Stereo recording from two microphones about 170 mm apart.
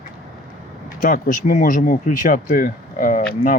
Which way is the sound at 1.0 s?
55° left (ahead or behind).